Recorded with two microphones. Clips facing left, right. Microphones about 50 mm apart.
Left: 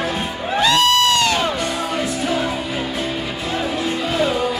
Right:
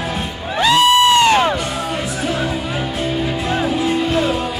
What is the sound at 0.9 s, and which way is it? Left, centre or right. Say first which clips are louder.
Crowd: right 5 dB; centre.